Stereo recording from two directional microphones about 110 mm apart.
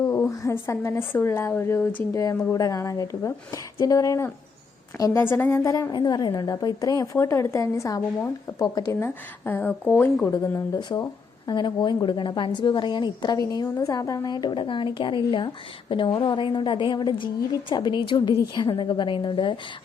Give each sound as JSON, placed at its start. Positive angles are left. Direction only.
{"t": 0.1, "sound": "a woman's voice", "side_deg": 25}
{"t": 2.1, "sound": "a woman's voice", "side_deg": 30}
{"t": 5.9, "sound": "a woman's voice", "side_deg": 40}
{"t": 10.8, "sound": "a woman's voice", "side_deg": 40}